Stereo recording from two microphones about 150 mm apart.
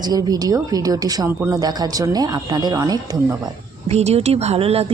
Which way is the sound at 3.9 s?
45° right (ahead or behind).